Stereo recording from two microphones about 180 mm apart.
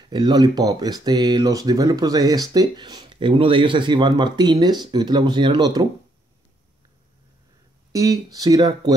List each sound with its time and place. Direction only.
0.1 s speech: 20° right (ahead or behind)
7.9 s speech: 20° right (ahead or behind)